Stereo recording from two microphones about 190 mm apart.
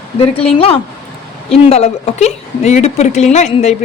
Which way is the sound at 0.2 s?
30° left (ahead or behind).